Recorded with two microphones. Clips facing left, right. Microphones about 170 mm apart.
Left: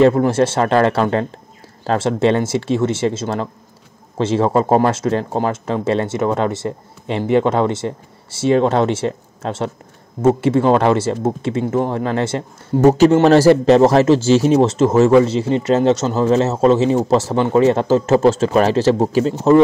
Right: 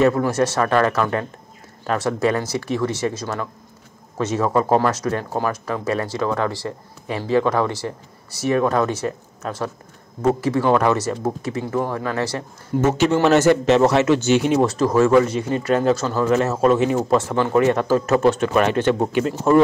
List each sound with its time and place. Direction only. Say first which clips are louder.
0.0 s speech: left 5 dB; 25° left (ahead or behind)
12.8 s speech: left 7 dB; 35° left (ahead or behind)